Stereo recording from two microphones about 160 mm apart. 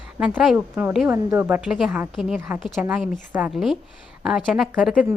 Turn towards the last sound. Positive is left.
turn(degrees=0)  # may be behind; listen again after turning